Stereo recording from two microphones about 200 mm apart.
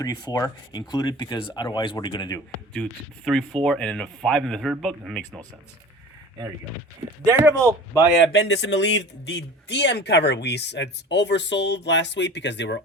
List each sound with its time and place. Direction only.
0.0 s speech: 15° left (ahead or behind)
3.2 s speech: 5° left (ahead or behind)
7.3 s speech: 15° right (ahead or behind)
8.2 s speech: 65° left (ahead or behind)